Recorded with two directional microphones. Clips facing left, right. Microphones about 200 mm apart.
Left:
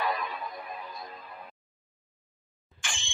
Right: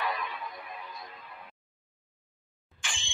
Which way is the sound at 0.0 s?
40° left (ahead or behind).